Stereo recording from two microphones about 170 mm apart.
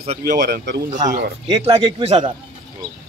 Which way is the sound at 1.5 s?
35° right (ahead or behind).